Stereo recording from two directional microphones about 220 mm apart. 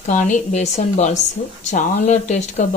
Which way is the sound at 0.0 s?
35° left (ahead or behind).